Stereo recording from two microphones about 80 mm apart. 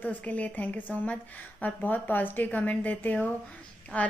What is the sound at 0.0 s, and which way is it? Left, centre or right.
A woman's voice, left.